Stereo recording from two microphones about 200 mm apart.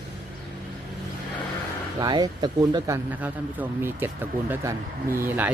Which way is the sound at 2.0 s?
20° right (ahead or behind).